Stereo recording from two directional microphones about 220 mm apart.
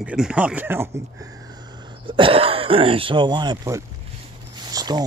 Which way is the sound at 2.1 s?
25° right (ahead or behind).